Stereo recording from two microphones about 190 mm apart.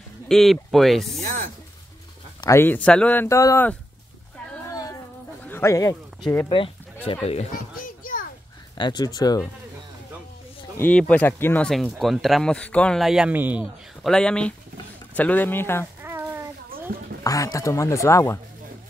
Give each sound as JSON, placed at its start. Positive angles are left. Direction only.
{"t": 0.3, "sound": "speech", "side_deg": 0}
{"t": 1.2, "sound": "speech", "side_deg": -40}
{"t": 2.4, "sound": "speech", "side_deg": 15}
{"t": 4.6, "sound": "a sound", "side_deg": 15}
{"t": 5.4, "sound": "speech", "side_deg": 10}
{"t": 7.5, "sound": "children playing", "side_deg": 45}
{"t": 8.7, "sound": "speech", "side_deg": 20}
{"t": 10.8, "sound": "speech", "side_deg": 5}
{"t": 14.1, "sound": "speech", "side_deg": 5}
{"t": 16.0, "sound": "a sound", "side_deg": -10}
{"t": 17.2, "sound": "speech", "side_deg": 20}